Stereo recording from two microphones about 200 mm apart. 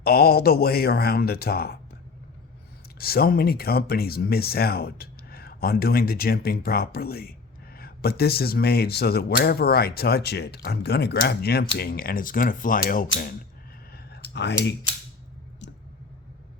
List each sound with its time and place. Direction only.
0.0 s speech: 50° left (ahead or behind)
3.0 s speech: 50° left (ahead or behind)
13.9 s clicking: 55° left (ahead or behind)
15.6 s clicking: 60° left (ahead or behind)